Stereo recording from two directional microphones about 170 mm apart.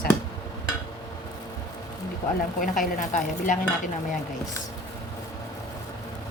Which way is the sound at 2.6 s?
50° left (ahead or behind).